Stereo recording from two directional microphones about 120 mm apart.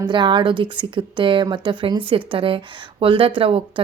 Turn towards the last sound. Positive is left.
turn(degrees=-45)  # may be behind; listen again after turning